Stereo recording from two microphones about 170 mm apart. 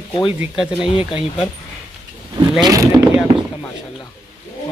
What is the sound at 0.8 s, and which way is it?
Speech, 30° left (ahead or behind).